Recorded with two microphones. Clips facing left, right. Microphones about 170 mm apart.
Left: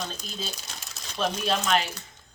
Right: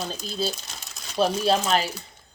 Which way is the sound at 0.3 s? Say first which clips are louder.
Right 8 dB; 35° right (ahead or behind).